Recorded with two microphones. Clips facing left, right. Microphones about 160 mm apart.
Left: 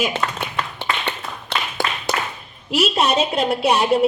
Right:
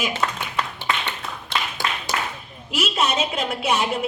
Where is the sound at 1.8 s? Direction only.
60° left (ahead or behind).